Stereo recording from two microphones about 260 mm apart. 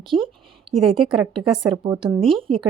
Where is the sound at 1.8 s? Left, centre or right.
Centre.